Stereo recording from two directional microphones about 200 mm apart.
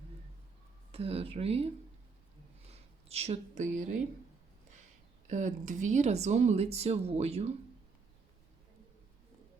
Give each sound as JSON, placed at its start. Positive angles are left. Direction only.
{"t": 0.9, "sound": "speech", "side_deg": -30}
{"t": 2.7, "sound": "speech", "side_deg": -30}
{"t": 5.3, "sound": "speech", "side_deg": -40}